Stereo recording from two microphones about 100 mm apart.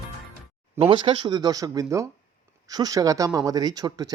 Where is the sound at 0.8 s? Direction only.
60° right (ahead or behind).